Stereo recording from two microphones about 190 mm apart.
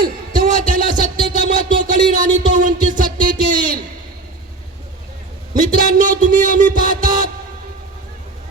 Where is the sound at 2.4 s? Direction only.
45° right (ahead or behind).